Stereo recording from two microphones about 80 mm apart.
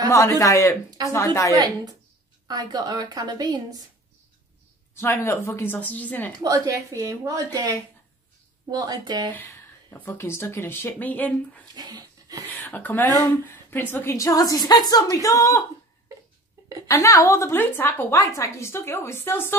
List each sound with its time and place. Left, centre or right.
0.1 s a woman's voice: left
2.4 s a woman's voice: right
4.9 s a woman's voice: left
5.7 s speech: left
6.4 s a woman's voice: right
9.3 s a sound: left
9.9 s speech: left
11.7 s dog: right
12.4 s speech: left
14.1 s speech: left
16.8 s a woman's voice: left
18.1 s a woman's voice: left